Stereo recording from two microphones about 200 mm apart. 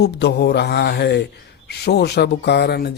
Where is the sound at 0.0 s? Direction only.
55° left (ahead or behind).